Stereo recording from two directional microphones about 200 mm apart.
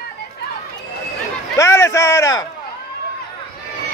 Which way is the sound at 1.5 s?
15° left (ahead or behind).